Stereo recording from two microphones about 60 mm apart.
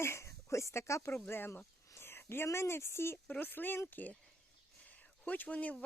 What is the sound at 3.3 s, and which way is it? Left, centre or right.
Speech, left.